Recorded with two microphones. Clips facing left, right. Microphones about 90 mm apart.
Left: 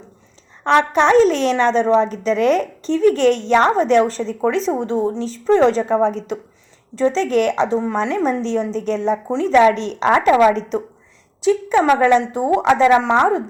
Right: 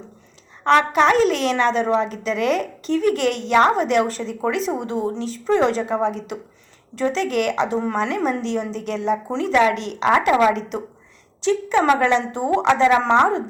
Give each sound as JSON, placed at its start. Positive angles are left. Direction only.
{"t": 0.8, "sound": "a woman's voice", "side_deg": 35}
{"t": 11.3, "sound": "a woman's voice", "side_deg": 15}